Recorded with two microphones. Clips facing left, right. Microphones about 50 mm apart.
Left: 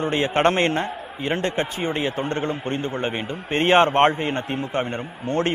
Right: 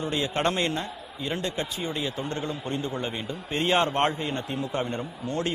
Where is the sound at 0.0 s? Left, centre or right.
Left.